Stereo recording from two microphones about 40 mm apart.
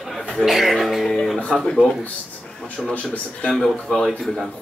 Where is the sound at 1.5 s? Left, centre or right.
Centre.